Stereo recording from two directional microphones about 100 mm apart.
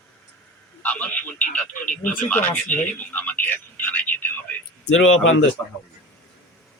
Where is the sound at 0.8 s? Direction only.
15° left (ahead or behind).